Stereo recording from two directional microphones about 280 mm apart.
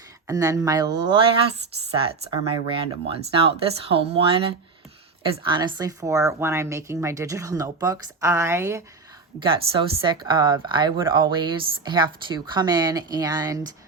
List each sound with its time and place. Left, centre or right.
0.3 s speech: centre